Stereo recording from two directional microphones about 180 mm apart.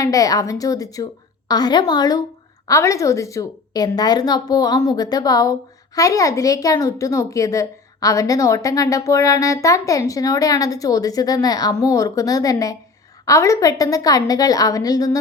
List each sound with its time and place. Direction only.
0.0 s a woman's voice: 20° left (ahead or behind)